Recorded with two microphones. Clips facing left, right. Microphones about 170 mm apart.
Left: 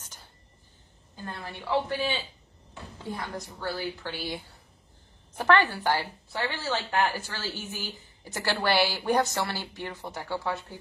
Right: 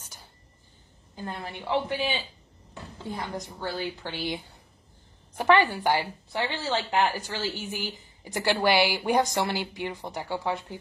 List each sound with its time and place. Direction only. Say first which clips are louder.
0.0 s a sound: right 1 dB; 10° right (ahead or behind)
1.1 s a woman's voice: right 3 dB; 20° right (ahead or behind)
5.4 s a woman's voice: right 2 dB; 15° right (ahead or behind)